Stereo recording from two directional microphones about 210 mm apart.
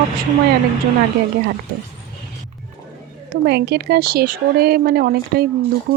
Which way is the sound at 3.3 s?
50° right (ahead or behind).